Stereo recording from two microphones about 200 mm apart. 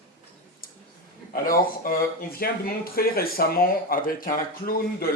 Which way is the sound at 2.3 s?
50° left (ahead or behind).